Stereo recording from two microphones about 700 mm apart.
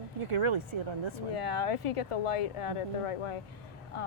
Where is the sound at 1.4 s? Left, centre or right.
Left.